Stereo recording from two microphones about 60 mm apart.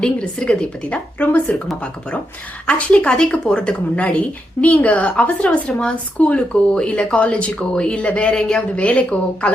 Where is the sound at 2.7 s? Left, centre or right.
Centre.